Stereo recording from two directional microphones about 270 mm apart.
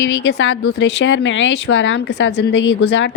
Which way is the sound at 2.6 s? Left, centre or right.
Left.